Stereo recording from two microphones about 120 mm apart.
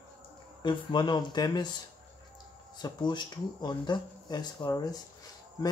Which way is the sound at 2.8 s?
40° left (ahead or behind).